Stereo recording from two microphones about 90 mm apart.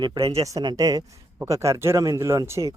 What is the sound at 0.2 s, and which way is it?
Speech, 90° right.